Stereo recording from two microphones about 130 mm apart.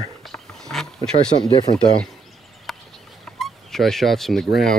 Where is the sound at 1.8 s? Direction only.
5° left (ahead or behind).